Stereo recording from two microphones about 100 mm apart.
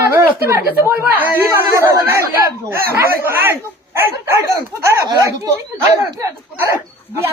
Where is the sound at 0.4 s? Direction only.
25° right (ahead or behind).